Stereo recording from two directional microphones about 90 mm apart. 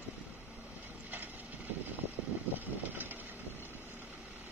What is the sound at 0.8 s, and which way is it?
Vehicle, 20° right (ahead or behind).